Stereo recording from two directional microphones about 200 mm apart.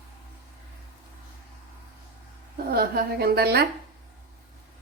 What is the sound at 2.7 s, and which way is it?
Speech, 50° right (ahead or behind).